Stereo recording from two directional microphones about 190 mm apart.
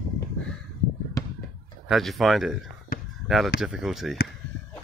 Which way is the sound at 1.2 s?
15° left (ahead or behind).